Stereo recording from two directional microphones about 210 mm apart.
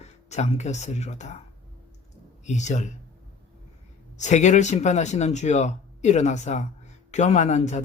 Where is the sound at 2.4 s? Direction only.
35° left (ahead or behind).